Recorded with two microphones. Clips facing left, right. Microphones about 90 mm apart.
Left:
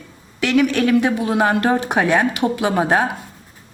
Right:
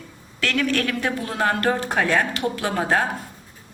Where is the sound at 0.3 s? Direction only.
15° left (ahead or behind).